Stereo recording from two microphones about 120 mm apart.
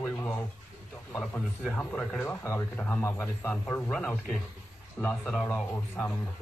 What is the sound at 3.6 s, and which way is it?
Speech, 10° left (ahead or behind).